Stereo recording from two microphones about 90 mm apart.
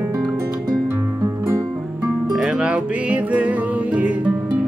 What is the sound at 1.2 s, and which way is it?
Music, 40° right (ahead or behind).